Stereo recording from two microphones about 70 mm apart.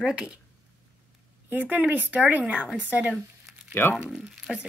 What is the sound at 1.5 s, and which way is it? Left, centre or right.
Speech, right.